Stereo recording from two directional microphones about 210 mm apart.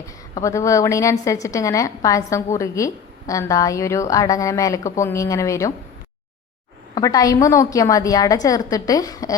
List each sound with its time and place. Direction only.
0.3 s a woman's voice: 15° left (ahead or behind)
6.9 s a woman's voice: 15° left (ahead or behind)